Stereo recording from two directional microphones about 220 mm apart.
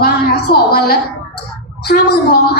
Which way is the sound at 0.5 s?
45° left (ahead or behind).